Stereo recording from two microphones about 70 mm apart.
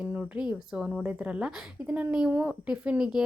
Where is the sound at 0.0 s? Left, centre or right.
Centre.